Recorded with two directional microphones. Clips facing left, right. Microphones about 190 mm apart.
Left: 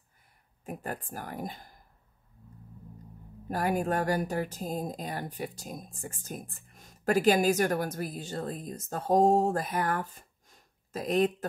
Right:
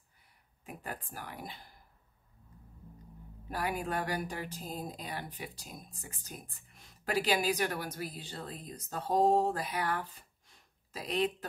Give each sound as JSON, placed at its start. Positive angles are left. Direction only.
{"t": 1.0, "sound": "speech", "side_deg": 45}
{"t": 3.4, "sound": "speech", "side_deg": 45}